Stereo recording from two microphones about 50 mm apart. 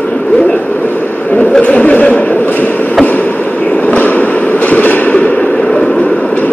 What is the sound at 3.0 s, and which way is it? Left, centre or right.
Train, left.